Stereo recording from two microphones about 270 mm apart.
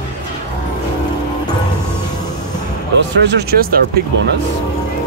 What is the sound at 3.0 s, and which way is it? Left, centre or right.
Speech, right.